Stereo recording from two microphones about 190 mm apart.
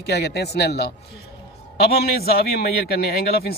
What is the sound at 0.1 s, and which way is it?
A man's voice, 60° left (ahead or behind).